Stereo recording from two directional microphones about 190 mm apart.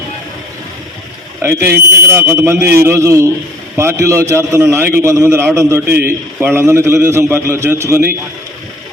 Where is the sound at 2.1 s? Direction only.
15° right (ahead or behind).